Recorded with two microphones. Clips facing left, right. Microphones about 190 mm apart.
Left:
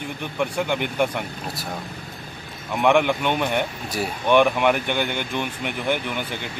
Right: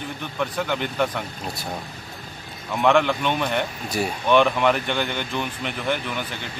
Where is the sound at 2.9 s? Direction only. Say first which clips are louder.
Left 1 dB; 15° left (ahead or behind).